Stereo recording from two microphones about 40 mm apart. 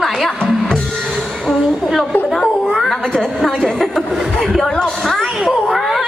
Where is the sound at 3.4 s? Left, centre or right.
Centre.